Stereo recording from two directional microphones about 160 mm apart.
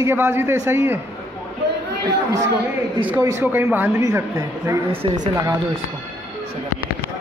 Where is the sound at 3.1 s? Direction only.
15° right (ahead or behind).